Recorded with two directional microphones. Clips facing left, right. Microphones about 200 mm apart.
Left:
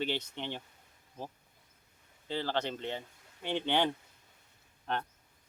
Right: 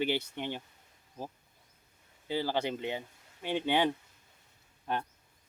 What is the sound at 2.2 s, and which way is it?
Speech, 10° right (ahead or behind).